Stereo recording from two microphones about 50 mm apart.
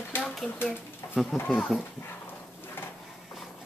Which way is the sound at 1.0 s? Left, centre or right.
Left.